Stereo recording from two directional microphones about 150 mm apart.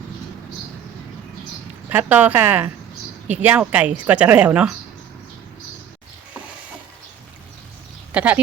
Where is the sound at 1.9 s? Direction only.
10° right (ahead or behind).